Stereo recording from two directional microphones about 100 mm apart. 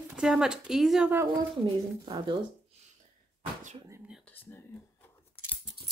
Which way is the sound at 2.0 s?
50° right (ahead or behind).